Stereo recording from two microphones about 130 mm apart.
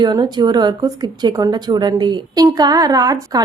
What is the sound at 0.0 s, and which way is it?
A woman's voice, 35° right (ahead or behind).